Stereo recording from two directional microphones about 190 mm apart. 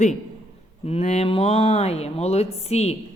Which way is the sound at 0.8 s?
35° left (ahead or behind).